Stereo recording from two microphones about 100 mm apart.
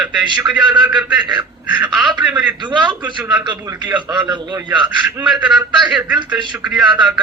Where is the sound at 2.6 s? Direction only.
50° right (ahead or behind).